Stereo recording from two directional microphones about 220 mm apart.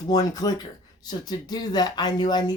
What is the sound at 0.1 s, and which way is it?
Speech, 15° left (ahead or behind).